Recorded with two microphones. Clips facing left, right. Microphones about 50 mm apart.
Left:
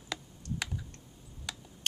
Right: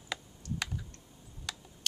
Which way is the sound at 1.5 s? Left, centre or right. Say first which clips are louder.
Even; centre.